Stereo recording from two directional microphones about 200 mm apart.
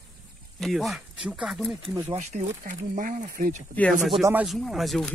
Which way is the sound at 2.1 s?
35° right (ahead or behind).